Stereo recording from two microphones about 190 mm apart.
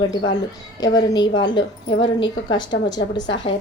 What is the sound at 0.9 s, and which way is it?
A woman's voice, 20° left (ahead or behind).